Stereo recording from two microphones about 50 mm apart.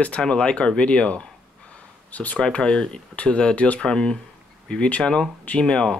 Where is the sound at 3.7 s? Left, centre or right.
Centre.